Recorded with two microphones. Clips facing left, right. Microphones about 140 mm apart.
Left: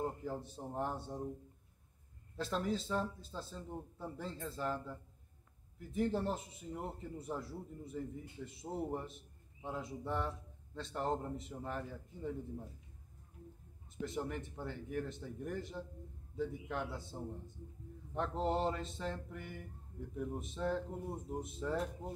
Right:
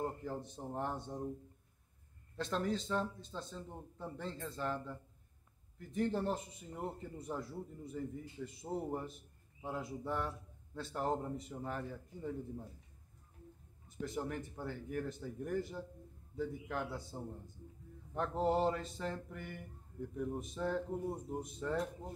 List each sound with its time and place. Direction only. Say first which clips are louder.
0.0 s a man's voice: even; 10° left (ahead or behind)
2.3 s a man's voice: even; 5° left (ahead or behind)
13.9 s a man's voice: even; centre (ahead or behind)